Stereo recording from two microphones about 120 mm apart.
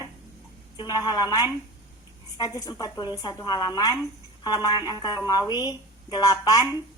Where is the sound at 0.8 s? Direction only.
35° left (ahead or behind).